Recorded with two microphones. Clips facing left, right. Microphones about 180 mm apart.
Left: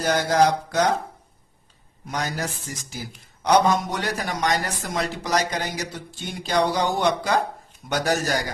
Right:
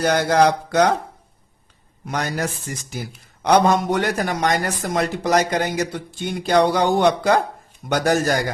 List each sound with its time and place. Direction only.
0.0 s speech: 65° right (ahead or behind)
2.0 s a man's voice: 65° right (ahead or behind)